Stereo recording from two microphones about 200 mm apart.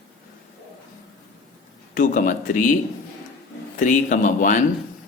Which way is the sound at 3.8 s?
40° left (ahead or behind).